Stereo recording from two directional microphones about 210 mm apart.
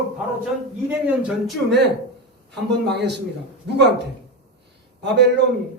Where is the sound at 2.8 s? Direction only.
55° right (ahead or behind).